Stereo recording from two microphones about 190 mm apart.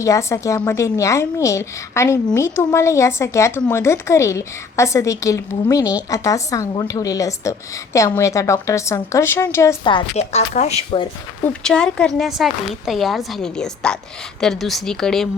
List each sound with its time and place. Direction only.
0.0 s a woman's voice: 15° left (ahead or behind)
9.8 s speech: 30° left (ahead or behind)
11.4 s speech: 5° left (ahead or behind)